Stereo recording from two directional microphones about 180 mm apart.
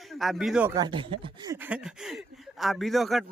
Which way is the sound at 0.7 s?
25° right (ahead or behind).